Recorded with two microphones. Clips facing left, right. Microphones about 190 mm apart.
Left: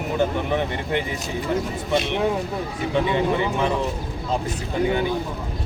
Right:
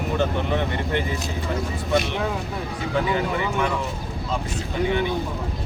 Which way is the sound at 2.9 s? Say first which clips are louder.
Left 3 dB; 25° left (ahead or behind).